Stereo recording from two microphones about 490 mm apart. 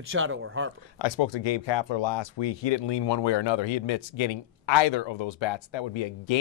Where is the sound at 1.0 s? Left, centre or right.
Left.